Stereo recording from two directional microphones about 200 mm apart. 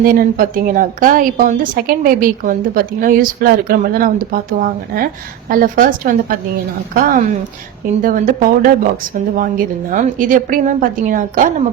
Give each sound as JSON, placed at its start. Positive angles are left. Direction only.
{"t": 0.0, "sound": "a woman's voice", "side_deg": -45}